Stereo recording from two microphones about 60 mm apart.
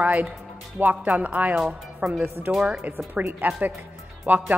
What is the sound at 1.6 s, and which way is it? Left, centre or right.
Speech, centre.